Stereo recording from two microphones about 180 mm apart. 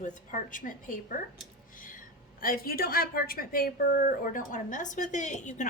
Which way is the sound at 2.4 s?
55° left (ahead or behind).